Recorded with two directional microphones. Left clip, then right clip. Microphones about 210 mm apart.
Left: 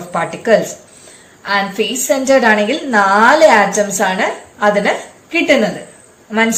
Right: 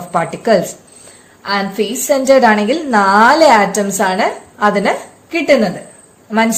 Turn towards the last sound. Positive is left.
turn(degrees=-55)  # may be behind; listen again after turning